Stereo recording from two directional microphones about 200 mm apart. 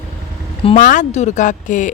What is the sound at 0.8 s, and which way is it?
A woman's voice, 40° left (ahead or behind).